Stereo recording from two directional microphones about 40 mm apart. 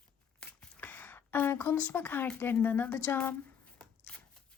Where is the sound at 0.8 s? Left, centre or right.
Left.